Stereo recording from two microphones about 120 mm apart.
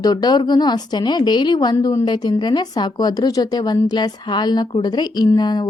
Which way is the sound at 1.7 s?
25° left (ahead or behind).